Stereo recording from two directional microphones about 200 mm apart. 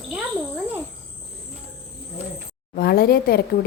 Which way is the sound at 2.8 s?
50° left (ahead or behind).